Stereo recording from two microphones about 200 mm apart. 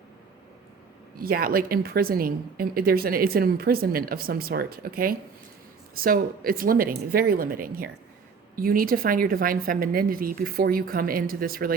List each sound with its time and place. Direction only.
1.2 s a woman's voice: 45° right (ahead or behind)